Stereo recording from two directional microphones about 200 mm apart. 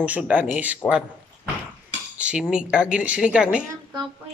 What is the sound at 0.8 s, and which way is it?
Speech, 10° left (ahead or behind).